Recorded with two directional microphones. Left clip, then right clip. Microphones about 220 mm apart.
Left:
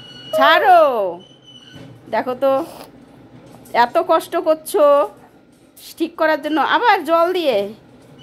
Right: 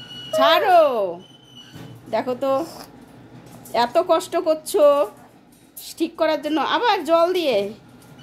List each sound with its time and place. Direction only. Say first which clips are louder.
0.3 s a woman's voice: left 4 dB; 10° left (ahead or behind)
2.6 s speech: left 2 dB; 20° left (ahead or behind)
3.7 s a woman's voice: left 3 dB; 10° left (ahead or behind)